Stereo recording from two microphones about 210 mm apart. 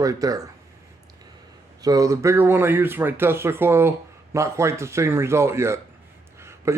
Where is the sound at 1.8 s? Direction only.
15° right (ahead or behind).